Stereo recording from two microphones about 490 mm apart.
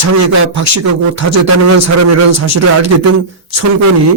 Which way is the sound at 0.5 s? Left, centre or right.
Right.